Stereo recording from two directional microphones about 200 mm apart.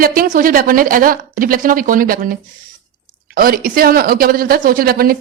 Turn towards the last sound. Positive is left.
turn(degrees=-50)  # may be behind; listen again after turning